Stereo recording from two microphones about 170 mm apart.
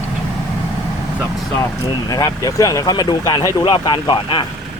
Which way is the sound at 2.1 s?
20° left (ahead or behind).